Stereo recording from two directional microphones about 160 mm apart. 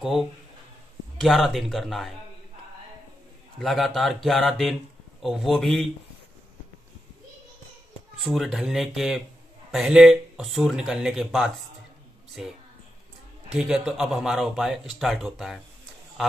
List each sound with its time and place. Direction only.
0.0 s speech: centre (ahead or behind)
3.6 s speech: centre (ahead or behind)
8.2 s speech: centre (ahead or behind)
13.6 s speech: 5° right (ahead or behind)